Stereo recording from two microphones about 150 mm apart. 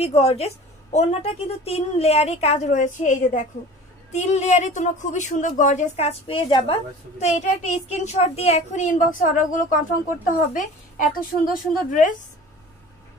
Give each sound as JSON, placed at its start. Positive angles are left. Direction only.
{"t": 0.0, "sound": "a woman's voice", "side_deg": 45}